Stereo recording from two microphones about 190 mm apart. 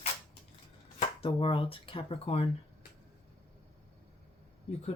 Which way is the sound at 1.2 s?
25° left (ahead or behind).